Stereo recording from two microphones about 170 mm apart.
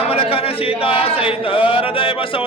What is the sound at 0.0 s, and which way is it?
Speech, 35° left (ahead or behind).